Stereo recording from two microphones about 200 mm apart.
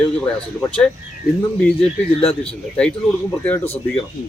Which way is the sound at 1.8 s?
30° left (ahead or behind).